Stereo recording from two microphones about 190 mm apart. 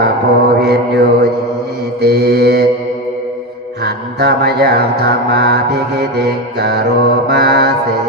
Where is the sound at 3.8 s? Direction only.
55° right (ahead or behind).